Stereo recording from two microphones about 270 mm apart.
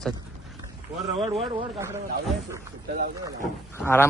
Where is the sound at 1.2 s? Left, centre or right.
Right.